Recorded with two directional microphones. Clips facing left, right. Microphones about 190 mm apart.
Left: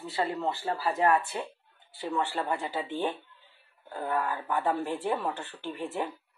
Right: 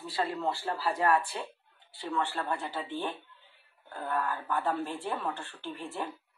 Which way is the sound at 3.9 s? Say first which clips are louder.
Left 2 dB; 20° left (ahead or behind).